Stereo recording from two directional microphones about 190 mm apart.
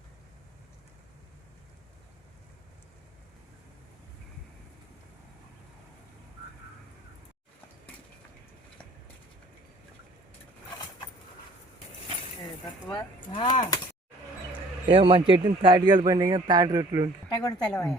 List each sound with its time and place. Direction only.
12.9 s speech: 25° left (ahead or behind)
14.8 s a man's voice: 30° right (ahead or behind)
17.7 s speech: 5° left (ahead or behind)